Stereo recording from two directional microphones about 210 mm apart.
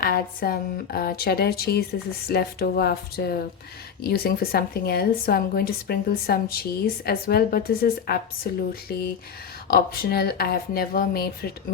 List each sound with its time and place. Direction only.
0.0 s a woman's voice: 45° left (ahead or behind)